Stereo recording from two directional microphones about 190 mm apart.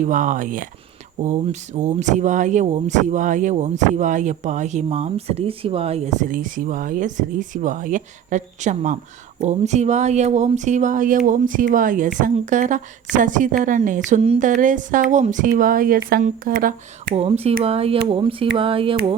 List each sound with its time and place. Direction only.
0.0 s speech: 40° right (ahead or behind)
17.2 s speech: 30° right (ahead or behind)